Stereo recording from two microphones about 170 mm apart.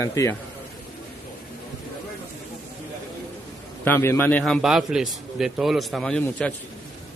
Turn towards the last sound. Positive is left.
turn(degrees=5)  # may be behind; listen again after turning